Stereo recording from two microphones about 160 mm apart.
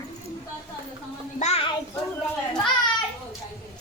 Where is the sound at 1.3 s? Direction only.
40° left (ahead or behind).